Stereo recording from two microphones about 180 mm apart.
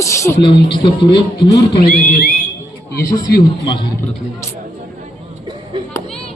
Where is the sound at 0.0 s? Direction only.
15° left (ahead or behind).